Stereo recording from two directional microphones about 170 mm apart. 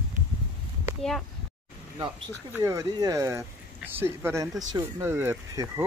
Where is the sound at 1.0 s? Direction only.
5° left (ahead or behind).